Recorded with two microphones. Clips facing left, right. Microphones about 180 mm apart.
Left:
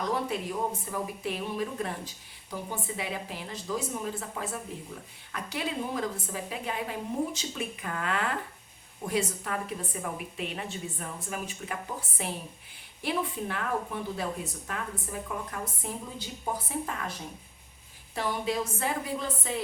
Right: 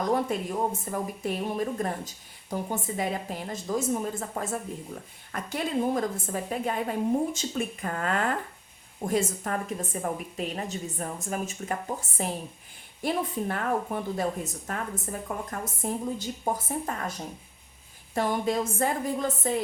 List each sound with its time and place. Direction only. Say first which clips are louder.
0.0 s a woman's voice: right 4 dB; 45° right (ahead or behind)